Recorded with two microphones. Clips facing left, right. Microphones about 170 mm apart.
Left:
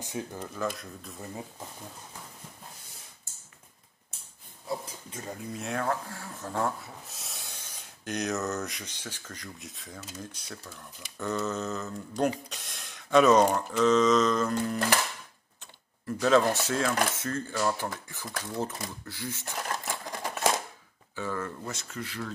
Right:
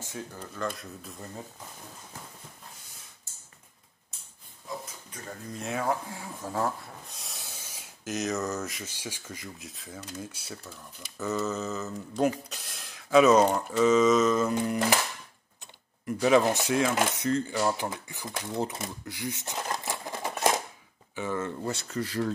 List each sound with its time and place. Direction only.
0.0 s speech: 15° left (ahead or behind)
0.6 s speech: centre (ahead or behind)
4.6 s a sound: 30° left (ahead or behind)
5.5 s speech: centre (ahead or behind)
5.9 s speech: 15° right (ahead or behind)
19.8 s sewing machine: centre (ahead or behind)
21.1 s speech: 20° right (ahead or behind)
21.6 s speech: 35° right (ahead or behind)